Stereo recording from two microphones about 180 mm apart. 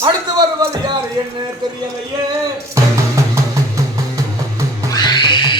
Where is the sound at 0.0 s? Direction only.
20° right (ahead or behind).